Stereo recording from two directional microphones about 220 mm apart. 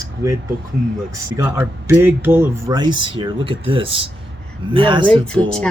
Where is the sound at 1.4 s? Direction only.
10° right (ahead or behind).